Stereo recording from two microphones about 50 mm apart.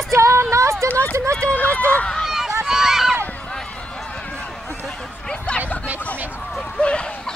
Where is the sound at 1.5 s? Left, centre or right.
Left.